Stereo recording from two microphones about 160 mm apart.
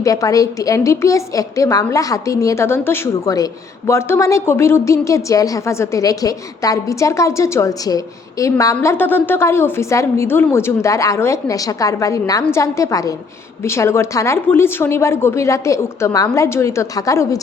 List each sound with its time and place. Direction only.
0.0 s a woman's voice: 20° left (ahead or behind)